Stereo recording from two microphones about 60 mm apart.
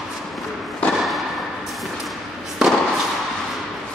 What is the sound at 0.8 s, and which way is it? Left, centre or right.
Thump, left.